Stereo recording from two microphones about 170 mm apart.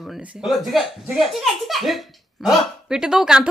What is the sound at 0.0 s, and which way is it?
A child's voice, centre (ahead or behind).